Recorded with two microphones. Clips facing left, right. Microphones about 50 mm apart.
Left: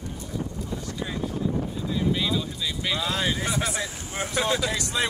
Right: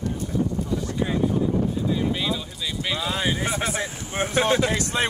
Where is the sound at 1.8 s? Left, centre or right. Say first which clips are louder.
Right 2 dB; centre.